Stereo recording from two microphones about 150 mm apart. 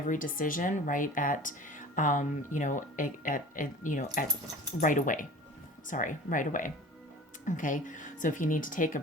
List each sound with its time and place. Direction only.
0.1 s speech: 65° left (ahead or behind)